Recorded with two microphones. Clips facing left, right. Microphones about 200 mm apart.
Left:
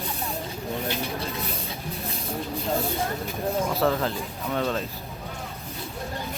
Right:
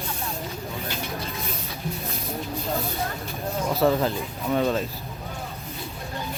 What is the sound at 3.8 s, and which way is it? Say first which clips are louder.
Speech: right 3 dB; 15° right (ahead or behind).